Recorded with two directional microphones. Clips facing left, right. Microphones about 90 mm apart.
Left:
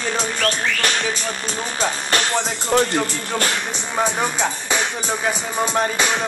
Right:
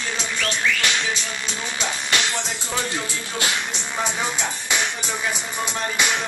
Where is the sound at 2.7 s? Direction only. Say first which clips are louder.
Left 10 dB; 50° left (ahead or behind).